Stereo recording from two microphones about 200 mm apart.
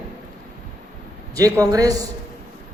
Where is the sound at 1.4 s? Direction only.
15° right (ahead or behind).